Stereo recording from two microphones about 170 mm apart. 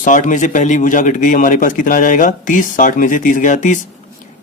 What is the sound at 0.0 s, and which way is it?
Speech, 50° left (ahead or behind).